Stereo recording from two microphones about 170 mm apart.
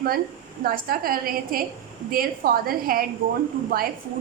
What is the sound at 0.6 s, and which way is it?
A woman's voice, 60° right (ahead or behind).